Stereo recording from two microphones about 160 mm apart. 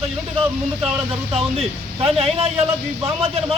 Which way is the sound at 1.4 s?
40° right (ahead or behind).